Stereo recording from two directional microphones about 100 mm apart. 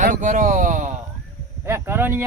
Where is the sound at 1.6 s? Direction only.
25° right (ahead or behind).